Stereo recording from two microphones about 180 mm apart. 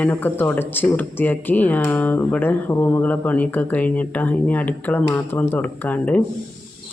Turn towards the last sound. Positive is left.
turn(degrees=10)  # may be behind; listen again after turning